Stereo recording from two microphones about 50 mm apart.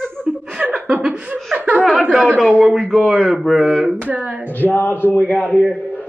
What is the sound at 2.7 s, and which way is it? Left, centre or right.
Mantra, centre.